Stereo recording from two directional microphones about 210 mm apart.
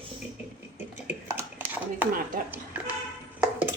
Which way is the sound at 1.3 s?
10° right (ahead or behind).